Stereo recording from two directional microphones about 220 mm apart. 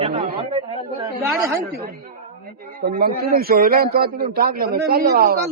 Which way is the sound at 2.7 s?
40° right (ahead or behind).